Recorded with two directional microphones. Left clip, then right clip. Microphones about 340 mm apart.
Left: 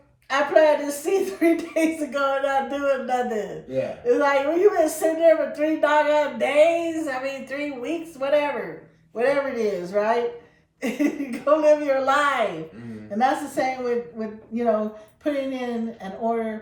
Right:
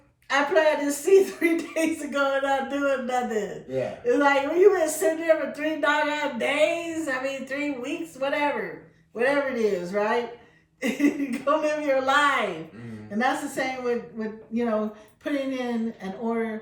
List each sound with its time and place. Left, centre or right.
0.3 s speech: centre